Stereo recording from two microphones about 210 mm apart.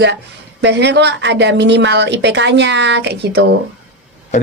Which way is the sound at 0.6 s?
55° right (ahead or behind).